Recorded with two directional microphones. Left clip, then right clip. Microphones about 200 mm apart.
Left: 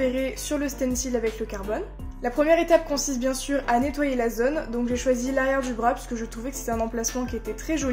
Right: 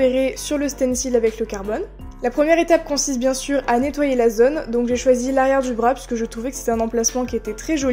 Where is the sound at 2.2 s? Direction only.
35° right (ahead or behind).